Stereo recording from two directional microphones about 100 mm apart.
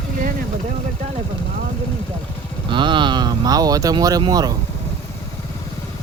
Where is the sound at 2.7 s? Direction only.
55° right (ahead or behind).